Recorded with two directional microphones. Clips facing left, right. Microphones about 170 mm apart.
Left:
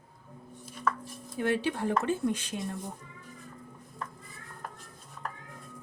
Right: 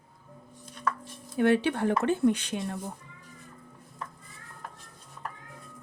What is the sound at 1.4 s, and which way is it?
Speech, 65° right (ahead or behind).